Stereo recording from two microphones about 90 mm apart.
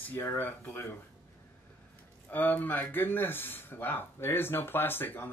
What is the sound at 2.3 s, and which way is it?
Speech, 20° left (ahead or behind).